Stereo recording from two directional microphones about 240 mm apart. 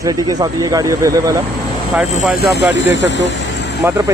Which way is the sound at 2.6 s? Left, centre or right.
Left.